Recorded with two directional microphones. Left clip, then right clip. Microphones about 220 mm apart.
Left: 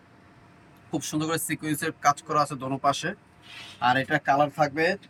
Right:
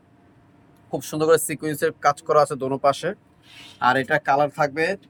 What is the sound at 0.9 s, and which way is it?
Speech, 25° right (ahead or behind).